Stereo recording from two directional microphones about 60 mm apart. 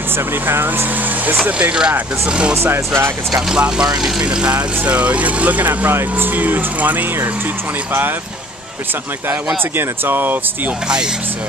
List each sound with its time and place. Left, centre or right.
0.5 s speech: right; by 2.5 s centre
2.5 s speech: right
3.4 s speech: centre; by 7.1 s right
9.8 s speech: right